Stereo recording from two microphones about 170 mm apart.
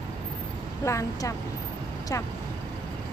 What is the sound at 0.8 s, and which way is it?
Speech, 20° left (ahead or behind).